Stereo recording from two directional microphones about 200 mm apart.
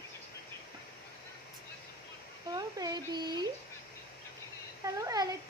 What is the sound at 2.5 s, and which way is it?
Speech, 20° right (ahead or behind).